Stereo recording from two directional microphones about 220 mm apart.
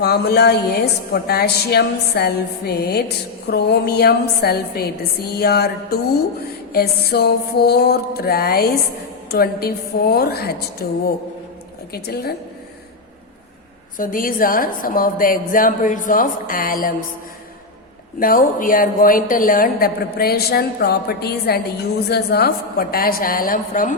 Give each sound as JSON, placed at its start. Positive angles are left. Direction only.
{"t": 0.0, "sound": "a woman's voice", "side_deg": 50}
{"t": 14.0, "sound": "a woman's voice", "side_deg": 40}
{"t": 18.2, "sound": "a woman's voice", "side_deg": 40}